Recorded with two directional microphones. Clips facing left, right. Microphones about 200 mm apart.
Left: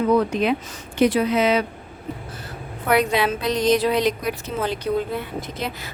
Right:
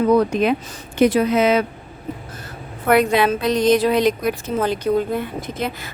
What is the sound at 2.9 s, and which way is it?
A woman's voice, 50° right (ahead or behind).